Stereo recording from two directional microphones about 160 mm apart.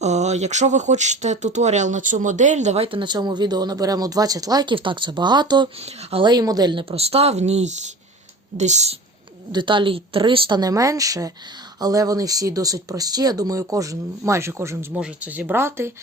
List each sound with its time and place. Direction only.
0.0 s speech: 45° right (ahead or behind); by 5.6 s 25° right (ahead or behind)
5.8 s speech: 35° right (ahead or behind)
6.9 s speech: 40° right (ahead or behind)
9.5 s speech: 30° right (ahead or behind)